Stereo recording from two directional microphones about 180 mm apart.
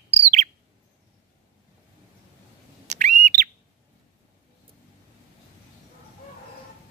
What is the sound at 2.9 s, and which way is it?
Bird, 40° right (ahead or behind).